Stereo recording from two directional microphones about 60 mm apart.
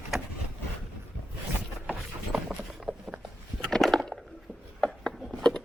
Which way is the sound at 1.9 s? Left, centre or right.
Centre.